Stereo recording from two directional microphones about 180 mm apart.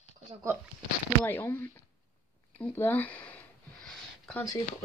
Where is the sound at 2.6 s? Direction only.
10° left (ahead or behind).